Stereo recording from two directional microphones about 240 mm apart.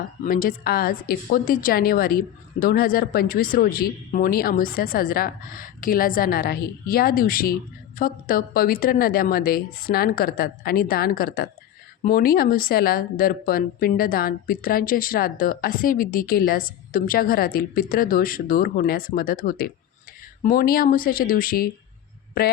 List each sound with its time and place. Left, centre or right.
0.3 s speech: left